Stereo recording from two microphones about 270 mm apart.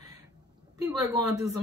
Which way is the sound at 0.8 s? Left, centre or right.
Centre.